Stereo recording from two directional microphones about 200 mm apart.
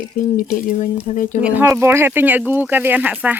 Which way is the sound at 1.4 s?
10° right (ahead or behind).